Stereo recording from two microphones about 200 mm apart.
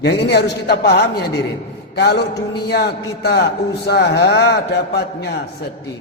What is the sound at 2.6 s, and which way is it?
A man's voice, 55° left (ahead or behind).